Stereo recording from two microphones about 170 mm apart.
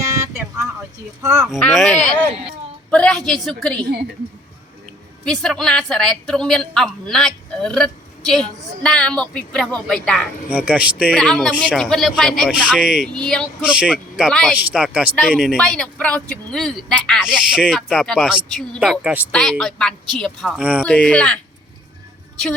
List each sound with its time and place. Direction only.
1.2 s speech: 15° right (ahead or behind)
1.5 s a woman's voice: centre (ahead or behind)
5.2 s a woman's voice: 5° left (ahead or behind)
13.7 s a woman's voice: 5° right (ahead or behind)
20.8 s speech: 5° left (ahead or behind)